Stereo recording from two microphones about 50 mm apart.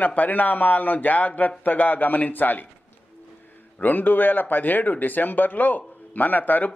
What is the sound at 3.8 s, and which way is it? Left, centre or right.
Speech, left.